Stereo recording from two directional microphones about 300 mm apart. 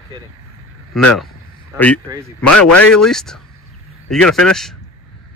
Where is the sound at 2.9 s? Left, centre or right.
Centre.